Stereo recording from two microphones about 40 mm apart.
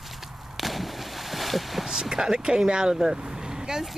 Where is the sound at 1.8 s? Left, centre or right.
Centre.